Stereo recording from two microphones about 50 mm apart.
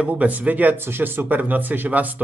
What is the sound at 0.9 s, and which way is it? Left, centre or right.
Speech, right.